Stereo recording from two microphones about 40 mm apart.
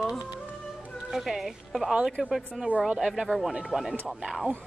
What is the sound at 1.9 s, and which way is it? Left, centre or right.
A woman's voice, centre.